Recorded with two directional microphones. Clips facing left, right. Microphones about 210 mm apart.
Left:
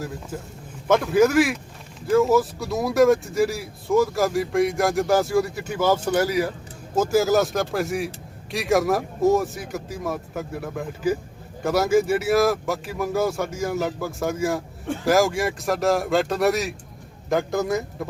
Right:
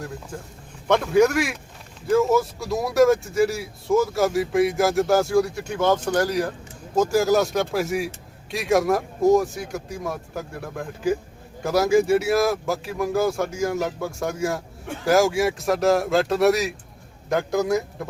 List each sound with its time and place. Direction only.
0.0 s speech: 5° left (ahead or behind)